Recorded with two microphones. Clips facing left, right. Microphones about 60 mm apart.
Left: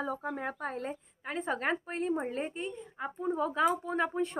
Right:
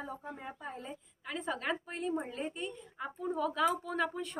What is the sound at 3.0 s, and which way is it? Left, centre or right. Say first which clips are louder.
A woman's voice: left 3 dB; left.